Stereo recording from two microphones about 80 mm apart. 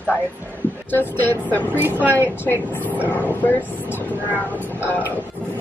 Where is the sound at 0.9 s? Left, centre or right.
Left.